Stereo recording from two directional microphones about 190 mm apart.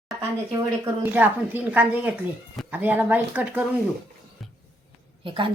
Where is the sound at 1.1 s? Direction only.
10° right (ahead or behind).